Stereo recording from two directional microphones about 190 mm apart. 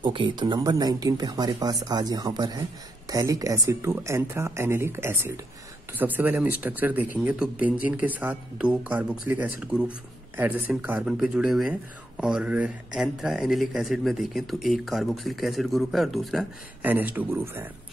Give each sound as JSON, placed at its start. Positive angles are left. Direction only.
{"t": 0.0, "sound": "speech", "side_deg": -25}